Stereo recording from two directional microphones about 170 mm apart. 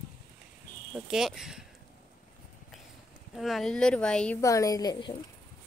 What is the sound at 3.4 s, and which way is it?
A woman's voice, centre (ahead or behind).